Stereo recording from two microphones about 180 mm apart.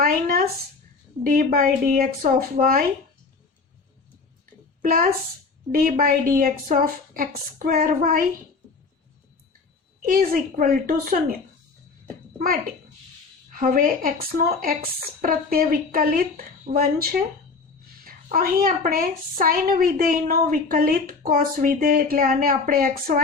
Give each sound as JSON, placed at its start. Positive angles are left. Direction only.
{"t": 0.0, "sound": "a woman's voice", "side_deg": -55}
{"t": 4.8, "sound": "a woman's voice", "side_deg": -50}
{"t": 10.0, "sound": "a woman's voice", "side_deg": -50}
{"t": 13.5, "sound": "a woman's voice", "side_deg": -50}